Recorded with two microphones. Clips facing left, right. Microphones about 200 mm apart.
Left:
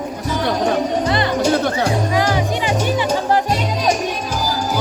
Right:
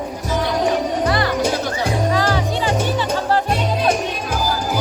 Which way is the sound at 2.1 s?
15° left (ahead or behind).